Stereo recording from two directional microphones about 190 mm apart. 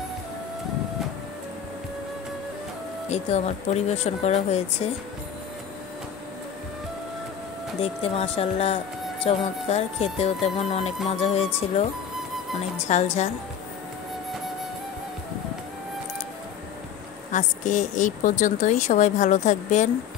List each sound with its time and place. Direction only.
3.1 s speech: 35° left (ahead or behind)
7.8 s speech: 30° left (ahead or behind)
17.3 s speech: 40° left (ahead or behind)